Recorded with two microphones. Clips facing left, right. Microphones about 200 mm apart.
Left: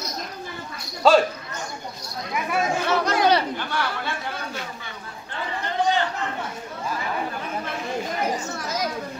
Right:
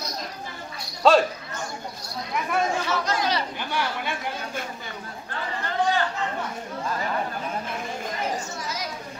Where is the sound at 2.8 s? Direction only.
60° left (ahead or behind).